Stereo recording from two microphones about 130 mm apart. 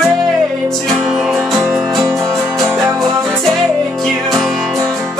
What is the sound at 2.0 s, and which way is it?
Music, 25° right (ahead or behind).